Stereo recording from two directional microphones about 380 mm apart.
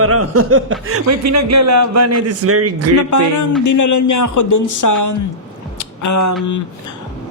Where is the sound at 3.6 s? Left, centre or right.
Left.